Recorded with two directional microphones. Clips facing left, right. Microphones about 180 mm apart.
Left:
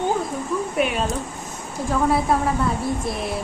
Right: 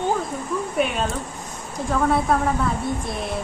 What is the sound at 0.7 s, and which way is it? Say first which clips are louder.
A woman's voice: even; centre (ahead or behind).